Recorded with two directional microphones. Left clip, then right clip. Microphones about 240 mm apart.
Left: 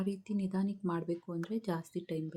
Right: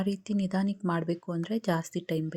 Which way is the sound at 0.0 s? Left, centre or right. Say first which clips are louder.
Right 6 dB; right.